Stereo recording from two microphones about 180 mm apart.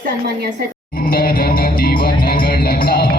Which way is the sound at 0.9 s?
55° left (ahead or behind).